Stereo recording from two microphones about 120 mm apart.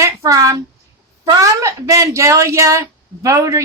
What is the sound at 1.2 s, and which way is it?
A woman's voice, 30° right (ahead or behind).